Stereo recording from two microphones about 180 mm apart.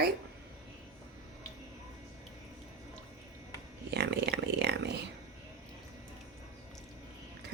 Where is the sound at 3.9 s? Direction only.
65° right (ahead or behind).